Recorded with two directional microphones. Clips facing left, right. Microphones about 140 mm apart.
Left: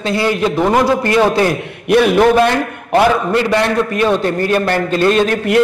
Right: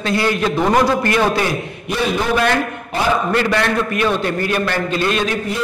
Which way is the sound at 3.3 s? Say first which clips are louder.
Left 3 dB; 25° left (ahead or behind).